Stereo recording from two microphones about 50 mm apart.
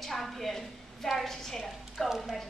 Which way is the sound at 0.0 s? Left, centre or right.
Centre.